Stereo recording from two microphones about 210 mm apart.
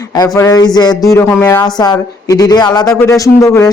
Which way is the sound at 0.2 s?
15° left (ahead or behind).